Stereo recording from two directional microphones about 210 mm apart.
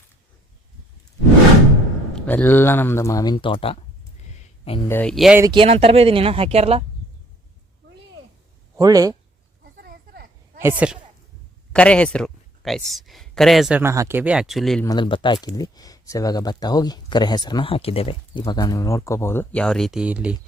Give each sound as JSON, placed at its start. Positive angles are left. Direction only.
{"t": 2.1, "sound": "speech", "side_deg": 10}
{"t": 4.9, "sound": "speech", "side_deg": 5}
{"t": 5.4, "sound": "speech", "side_deg": -20}
{"t": 8.7, "sound": "speech", "side_deg": -15}
{"t": 9.8, "sound": "a sound", "side_deg": -45}
{"t": 10.6, "sound": "speech", "side_deg": -10}
{"t": 11.7, "sound": "speech", "side_deg": 5}
{"t": 14.8, "sound": "speech", "side_deg": 20}